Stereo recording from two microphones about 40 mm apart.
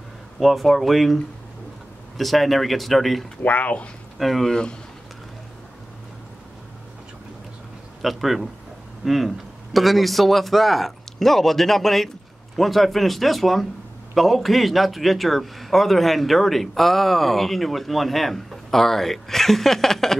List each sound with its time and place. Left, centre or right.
0.4 s a man's voice: centre
3.4 s speech: left
4.2 s a man's voice: centre
4.5 s speech: left
8.0 s a man's voice: centre